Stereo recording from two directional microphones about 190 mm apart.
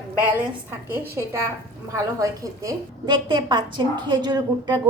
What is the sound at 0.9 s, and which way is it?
A woman's voice, 10° right (ahead or behind).